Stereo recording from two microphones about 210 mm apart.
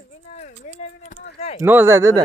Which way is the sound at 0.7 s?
35° left (ahead or behind).